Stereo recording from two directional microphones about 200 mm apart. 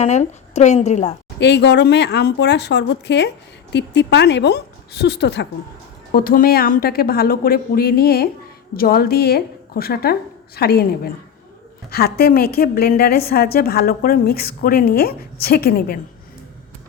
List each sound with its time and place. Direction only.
0.0 s a woman's voice: 35° left (ahead or behind)
1.4 s speech: 60° left (ahead or behind)
6.1 s a woman's voice: 45° left (ahead or behind)